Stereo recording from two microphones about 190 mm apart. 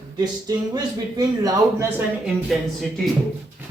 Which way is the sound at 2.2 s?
Centre (ahead or behind).